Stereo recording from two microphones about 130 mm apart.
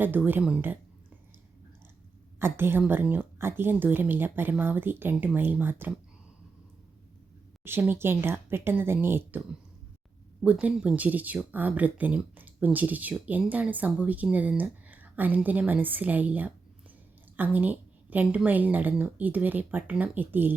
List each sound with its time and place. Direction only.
0.0 s a woman's voice: 15° right (ahead or behind)
2.4 s a woman's voice: 15° right (ahead or behind)
7.6 s a woman's voice: 15° right (ahead or behind)
10.4 s a woman's voice: 10° right (ahead or behind)